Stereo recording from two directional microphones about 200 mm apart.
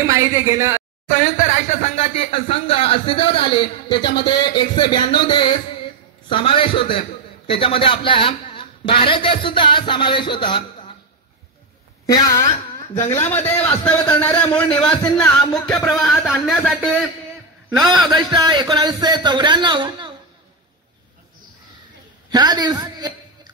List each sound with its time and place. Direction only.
0.0 s speech: 15° right (ahead or behind)
1.0 s a man's voice: 40° left (ahead or behind); by 10.6 s 25° left (ahead or behind)
12.9 s a man's voice: 15° left (ahead or behind)
15.1 s music: 5° left (ahead or behind)
17.6 s a man's voice: 20° right (ahead or behind)
22.3 s a woman's voice: 20° right (ahead or behind)